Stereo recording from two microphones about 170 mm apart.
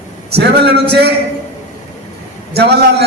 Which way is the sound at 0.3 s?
75° right (ahead or behind).